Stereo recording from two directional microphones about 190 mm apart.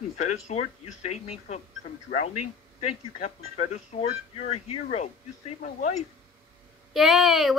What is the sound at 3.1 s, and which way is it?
Speech, 40° left (ahead or behind).